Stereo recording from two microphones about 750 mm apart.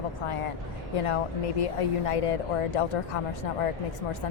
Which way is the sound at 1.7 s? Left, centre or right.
Left.